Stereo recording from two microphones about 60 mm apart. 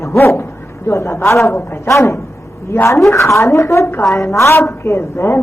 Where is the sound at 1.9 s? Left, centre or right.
Left.